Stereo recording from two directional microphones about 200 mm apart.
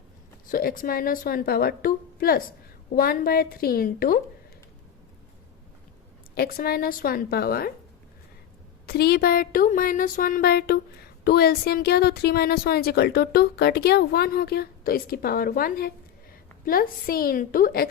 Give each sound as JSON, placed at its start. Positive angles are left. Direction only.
{"t": 0.5, "sound": "a woman's voice", "side_deg": 45}
{"t": 6.3, "sound": "a woman's voice", "side_deg": 50}
{"t": 8.9, "sound": "a woman's voice", "side_deg": 50}